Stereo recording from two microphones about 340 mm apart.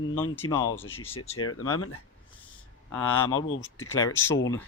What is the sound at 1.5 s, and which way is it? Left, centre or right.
Speech, left.